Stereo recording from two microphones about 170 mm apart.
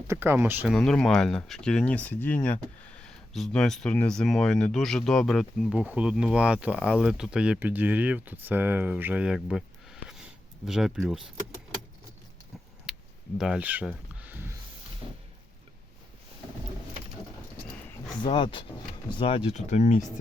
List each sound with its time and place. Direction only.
0.1 s speech: 15° right (ahead or behind)
0.7 s speech: 5° left (ahead or behind)
12.9 s a sound: 5° right (ahead or behind)
13.4 s speech: 5° right (ahead or behind)
18.2 s speech: 30° left (ahead or behind)